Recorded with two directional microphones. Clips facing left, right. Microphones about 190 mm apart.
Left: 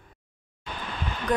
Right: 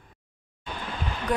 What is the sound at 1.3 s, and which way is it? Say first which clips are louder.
Speech: left 2 dB; 10° right (ahead or behind).